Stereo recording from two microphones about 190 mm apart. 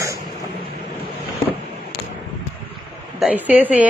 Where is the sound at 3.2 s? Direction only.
5° right (ahead or behind).